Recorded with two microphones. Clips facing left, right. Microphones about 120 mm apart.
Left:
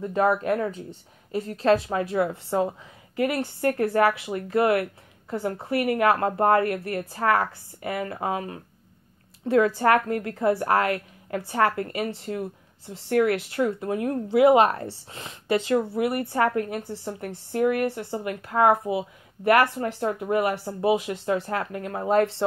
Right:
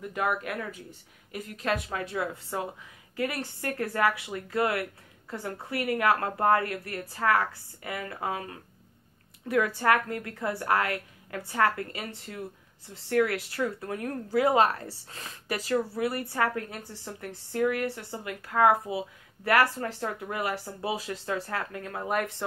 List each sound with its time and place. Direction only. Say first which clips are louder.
0.0 s speech: left 7 dB; 30° left (ahead or behind)